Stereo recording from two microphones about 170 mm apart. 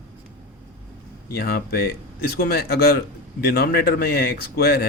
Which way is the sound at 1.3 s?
65° left (ahead or behind).